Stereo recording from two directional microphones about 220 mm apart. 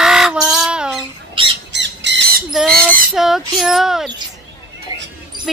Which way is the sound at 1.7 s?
55° right (ahead or behind).